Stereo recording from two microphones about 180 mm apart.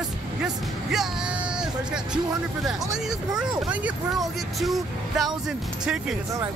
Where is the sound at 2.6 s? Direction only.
5° right (ahead or behind).